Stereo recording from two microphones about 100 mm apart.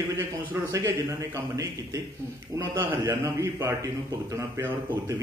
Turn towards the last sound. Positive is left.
turn(degrees=-30)  # may be behind; listen again after turning